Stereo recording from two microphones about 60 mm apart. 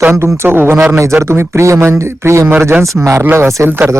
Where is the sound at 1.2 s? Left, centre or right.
Right.